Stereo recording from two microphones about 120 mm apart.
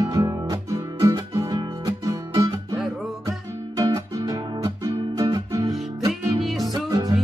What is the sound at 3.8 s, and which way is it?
Music, 30° right (ahead or behind).